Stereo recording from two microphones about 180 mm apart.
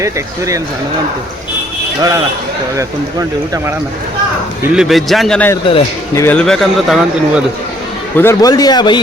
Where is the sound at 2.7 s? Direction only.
20° right (ahead or behind).